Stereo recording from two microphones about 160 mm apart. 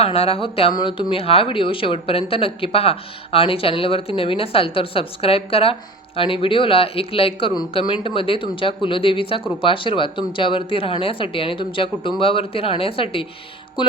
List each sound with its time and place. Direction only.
0.0 s speech: 40° left (ahead or behind)